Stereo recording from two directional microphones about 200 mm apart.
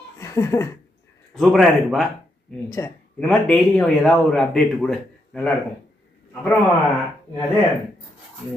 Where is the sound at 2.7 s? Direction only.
15° left (ahead or behind).